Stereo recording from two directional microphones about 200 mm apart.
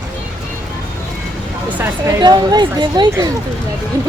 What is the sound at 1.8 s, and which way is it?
A woman's voice, 15° right (ahead or behind).